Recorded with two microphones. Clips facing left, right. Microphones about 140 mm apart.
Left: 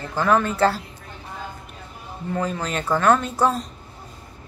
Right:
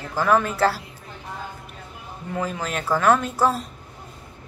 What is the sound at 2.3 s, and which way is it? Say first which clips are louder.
A woman's voice: left 2 dB; 5° right (ahead or behind).